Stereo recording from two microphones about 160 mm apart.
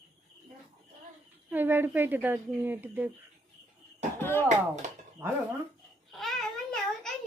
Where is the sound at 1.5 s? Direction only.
15° right (ahead or behind).